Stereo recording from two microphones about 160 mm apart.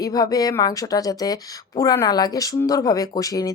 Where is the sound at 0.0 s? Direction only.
25° left (ahead or behind).